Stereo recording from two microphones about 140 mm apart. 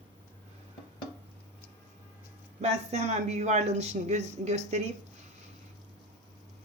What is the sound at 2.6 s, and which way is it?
Speech, 55° right (ahead or behind).